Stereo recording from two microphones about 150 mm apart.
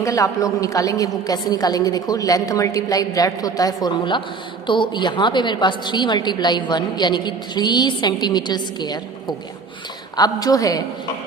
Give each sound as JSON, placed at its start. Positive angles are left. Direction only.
{"t": 0.0, "sound": "a woman's voice", "side_deg": 20}
{"t": 10.2, "sound": "a woman's voice", "side_deg": 25}